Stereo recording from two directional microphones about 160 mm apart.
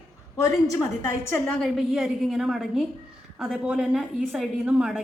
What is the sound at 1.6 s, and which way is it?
A woman's voice, centre (ahead or behind).